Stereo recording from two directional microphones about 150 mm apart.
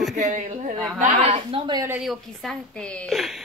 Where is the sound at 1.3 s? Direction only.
40° right (ahead or behind).